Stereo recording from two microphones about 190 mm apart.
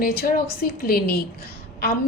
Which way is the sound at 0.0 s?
55° left (ahead or behind).